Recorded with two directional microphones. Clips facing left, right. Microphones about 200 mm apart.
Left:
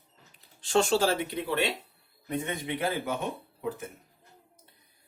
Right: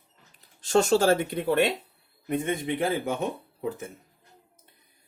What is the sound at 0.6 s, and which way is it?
Speech, 45° right (ahead or behind).